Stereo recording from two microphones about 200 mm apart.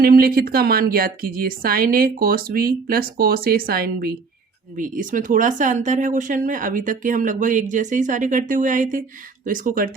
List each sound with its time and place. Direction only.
0.0 s a woman's voice: 50° right (ahead or behind)